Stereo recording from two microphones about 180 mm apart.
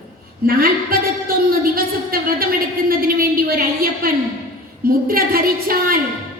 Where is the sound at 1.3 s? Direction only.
55° right (ahead or behind).